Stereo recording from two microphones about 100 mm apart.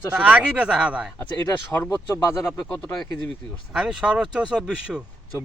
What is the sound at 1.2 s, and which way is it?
Speech, 20° left (ahead or behind).